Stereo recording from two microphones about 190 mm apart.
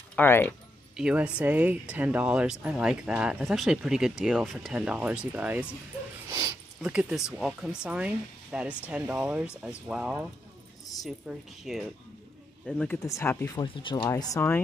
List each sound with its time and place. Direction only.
0.1 s speech: 10° left (ahead or behind)
0.9 s speech: 5° right (ahead or behind)
6.3 s a sound: 10° right (ahead or behind)
7.2 s speech: centre (ahead or behind); by 14.6 s 15° left (ahead or behind)